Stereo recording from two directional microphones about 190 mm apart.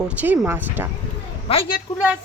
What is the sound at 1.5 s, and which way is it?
Speech, 30° left (ahead or behind).